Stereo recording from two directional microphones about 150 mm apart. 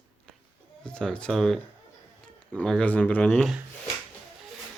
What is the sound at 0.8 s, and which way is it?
Speech, 5° left (ahead or behind).